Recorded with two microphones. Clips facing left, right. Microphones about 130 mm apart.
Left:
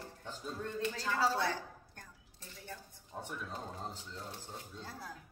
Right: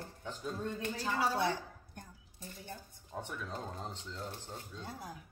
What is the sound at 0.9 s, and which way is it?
A woman's voice, 15° right (ahead or behind).